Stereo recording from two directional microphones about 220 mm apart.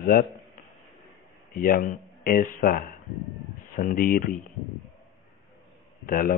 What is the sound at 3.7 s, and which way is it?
Speech, 40° left (ahead or behind).